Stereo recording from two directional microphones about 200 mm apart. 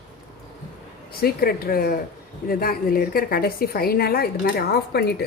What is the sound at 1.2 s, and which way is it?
Speech, 50° left (ahead or behind).